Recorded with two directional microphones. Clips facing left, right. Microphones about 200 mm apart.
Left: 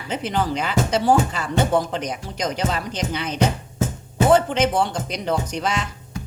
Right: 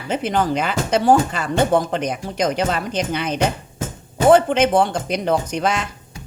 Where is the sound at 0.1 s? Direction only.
50° right (ahead or behind).